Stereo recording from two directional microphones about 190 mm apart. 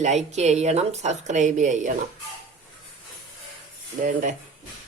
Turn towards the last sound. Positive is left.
turn(degrees=-40)  # may be behind; listen again after turning